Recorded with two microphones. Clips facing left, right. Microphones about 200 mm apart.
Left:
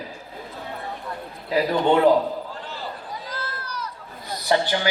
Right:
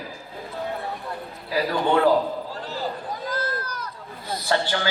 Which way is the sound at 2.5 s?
40° right (ahead or behind).